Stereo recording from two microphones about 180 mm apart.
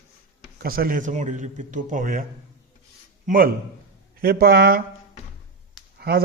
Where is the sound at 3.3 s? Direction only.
50° right (ahead or behind).